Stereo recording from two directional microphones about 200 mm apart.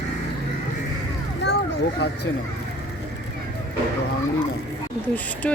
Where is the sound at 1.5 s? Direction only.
55° left (ahead or behind).